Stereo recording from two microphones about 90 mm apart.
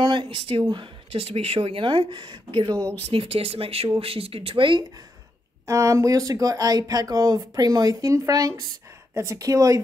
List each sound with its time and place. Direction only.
0.0 s speech: 60° right (ahead or behind); by 0.7 s 75° right (ahead or behind)
1.3 s speech: 90° right; by 2.8 s 60° right (ahead or behind)
3.1 s speech: 90° right; by 4.8 s 70° right (ahead or behind)
5.7 s speech: 35° right (ahead or behind)